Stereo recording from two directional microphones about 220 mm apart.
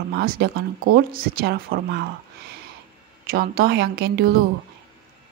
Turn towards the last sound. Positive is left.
turn(degrees=-45)  # may be behind; listen again after turning